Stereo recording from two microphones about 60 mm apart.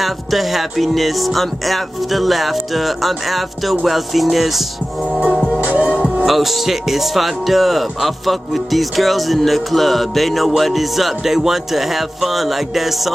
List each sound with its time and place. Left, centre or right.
0.0 s speech: centre
5.6 s music: right
6.2 s speech: centre